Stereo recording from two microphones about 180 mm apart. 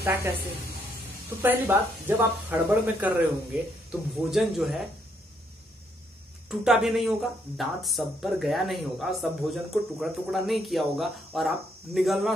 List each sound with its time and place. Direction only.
0.0 s a woman's voice: 10° right (ahead or behind)
1.4 s speech: 10° right (ahead or behind)
6.5 s speech: centre (ahead or behind)